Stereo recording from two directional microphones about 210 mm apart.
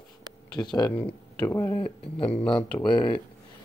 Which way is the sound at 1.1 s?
10° left (ahead or behind).